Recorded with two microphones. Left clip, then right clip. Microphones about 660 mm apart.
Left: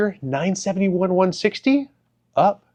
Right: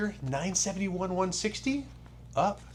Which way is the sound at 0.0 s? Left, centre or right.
Right.